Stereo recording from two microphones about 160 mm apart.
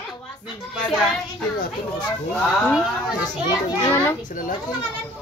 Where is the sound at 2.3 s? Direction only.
5° left (ahead or behind).